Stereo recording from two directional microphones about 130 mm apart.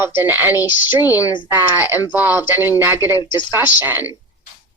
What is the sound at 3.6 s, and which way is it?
Speech, 15° right (ahead or behind).